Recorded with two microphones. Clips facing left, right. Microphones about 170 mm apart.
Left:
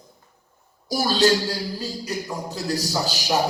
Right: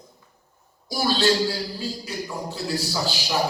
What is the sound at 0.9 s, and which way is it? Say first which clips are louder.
Music: left 3 dB; 40° left (ahead or behind).